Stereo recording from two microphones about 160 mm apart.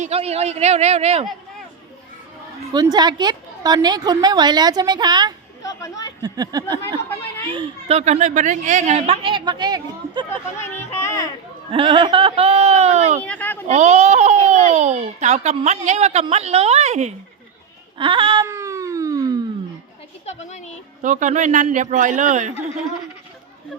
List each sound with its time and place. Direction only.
0.0 s speech: 40° right (ahead or behind)
2.9 s a woman's voice: 25° right (ahead or behind)
5.6 s speech: 20° left (ahead or behind)
6.2 s a woman's voice: 25° right (ahead or behind)
7.5 s speech: 35° right (ahead or behind)
10.2 s speech: 15° left (ahead or behind)
11.7 s speech: 35° right (ahead or behind)
13.2 s speech: 10° left (ahead or behind)
13.7 s speech: 45° right (ahead or behind)
17.9 s speech: 30° right (ahead or behind)
18.4 s a sound: 20° right (ahead or behind)
20.2 s a sound: 45° left (ahead or behind)
21.0 s speech: 50° right (ahead or behind)